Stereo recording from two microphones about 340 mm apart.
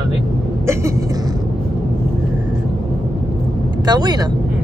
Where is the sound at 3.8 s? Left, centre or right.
Centre.